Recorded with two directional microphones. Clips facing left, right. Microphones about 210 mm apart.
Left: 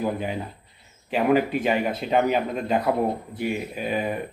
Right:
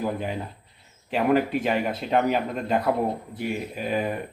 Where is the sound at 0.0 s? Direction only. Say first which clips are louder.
Left 1 dB; 5° left (ahead or behind).